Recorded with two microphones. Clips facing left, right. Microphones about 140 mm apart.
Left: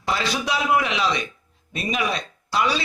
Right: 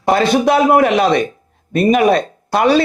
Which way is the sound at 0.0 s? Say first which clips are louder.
Right 12 dB; 55° right (ahead or behind).